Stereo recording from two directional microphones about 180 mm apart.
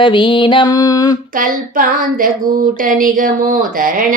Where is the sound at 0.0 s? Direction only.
25° left (ahead or behind).